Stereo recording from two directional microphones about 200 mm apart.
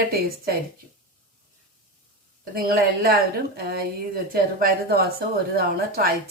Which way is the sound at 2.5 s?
45° right (ahead or behind).